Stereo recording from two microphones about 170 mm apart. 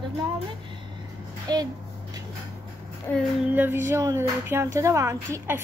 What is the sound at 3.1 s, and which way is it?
Speech, 10° left (ahead or behind).